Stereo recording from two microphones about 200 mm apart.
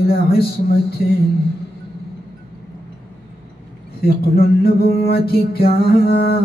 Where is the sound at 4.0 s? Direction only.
50° left (ahead or behind).